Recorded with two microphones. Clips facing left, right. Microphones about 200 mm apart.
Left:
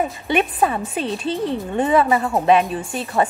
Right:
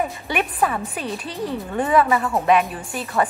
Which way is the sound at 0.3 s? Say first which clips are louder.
Left 4 dB; 25° left (ahead or behind).